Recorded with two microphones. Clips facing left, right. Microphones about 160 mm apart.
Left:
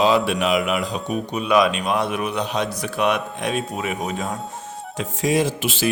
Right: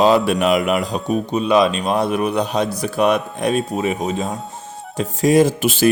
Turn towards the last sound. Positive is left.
turn(degrees=-45)  # may be behind; listen again after turning